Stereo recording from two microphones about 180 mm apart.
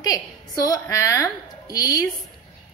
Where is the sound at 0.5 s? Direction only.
20° left (ahead or behind).